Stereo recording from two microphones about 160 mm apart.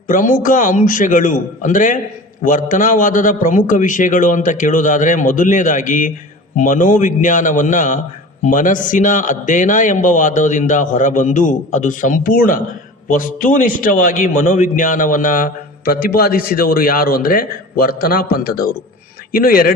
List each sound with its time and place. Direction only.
0.1 s a man's voice: 55° left (ahead or behind)